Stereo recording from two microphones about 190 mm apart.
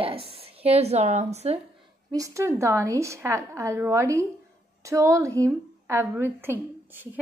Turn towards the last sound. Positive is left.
turn(degrees=-10)  # may be behind; listen again after turning